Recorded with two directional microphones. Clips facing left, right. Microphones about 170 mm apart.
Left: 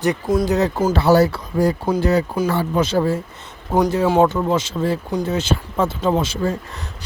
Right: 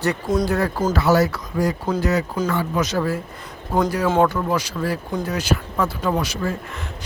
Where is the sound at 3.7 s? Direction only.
15° left (ahead or behind).